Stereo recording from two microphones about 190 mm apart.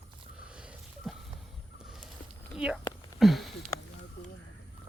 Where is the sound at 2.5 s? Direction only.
5° right (ahead or behind).